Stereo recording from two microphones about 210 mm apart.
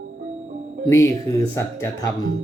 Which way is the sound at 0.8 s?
15° left (ahead or behind).